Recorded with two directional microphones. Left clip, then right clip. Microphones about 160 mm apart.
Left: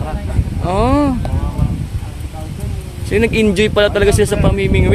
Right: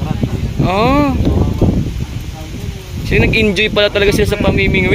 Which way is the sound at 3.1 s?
20° left (ahead or behind).